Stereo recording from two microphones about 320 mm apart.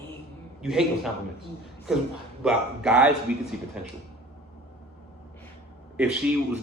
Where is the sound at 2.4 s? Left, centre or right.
Centre.